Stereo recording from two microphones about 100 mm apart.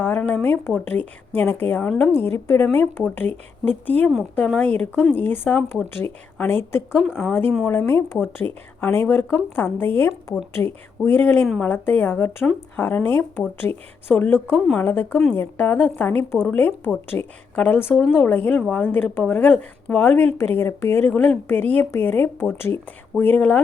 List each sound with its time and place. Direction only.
0.0 s a sound: 20° left (ahead or behind)
0.4 s a woman's voice: 20° left (ahead or behind)
6.6 s a woman's voice: 25° left (ahead or behind)